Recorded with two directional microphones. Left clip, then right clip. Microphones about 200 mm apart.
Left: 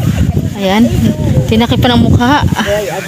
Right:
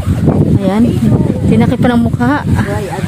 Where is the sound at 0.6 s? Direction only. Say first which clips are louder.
Left 2 dB; 10° right (ahead or behind).